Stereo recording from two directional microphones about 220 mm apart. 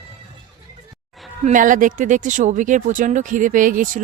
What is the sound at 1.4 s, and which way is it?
Speech, 35° right (ahead or behind).